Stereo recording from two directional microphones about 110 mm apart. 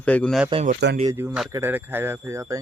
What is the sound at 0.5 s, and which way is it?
Speech, 85° right.